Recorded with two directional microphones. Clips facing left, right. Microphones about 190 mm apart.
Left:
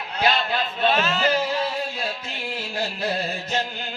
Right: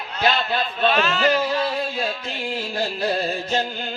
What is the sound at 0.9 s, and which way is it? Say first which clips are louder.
Speech: right 1 dB; 40° left (ahead or behind).